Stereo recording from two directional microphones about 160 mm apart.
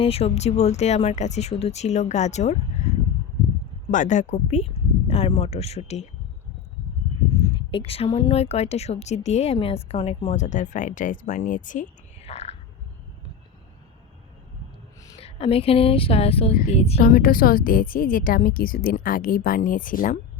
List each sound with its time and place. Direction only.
0.0 s a woman's voice: 40° left (ahead or behind)
3.9 s speech: 50° left (ahead or behind)
7.5 s a woman's voice: 35° left (ahead or behind)
15.2 s speech: 35° left (ahead or behind)
17.0 s a woman's voice: 60° left (ahead or behind)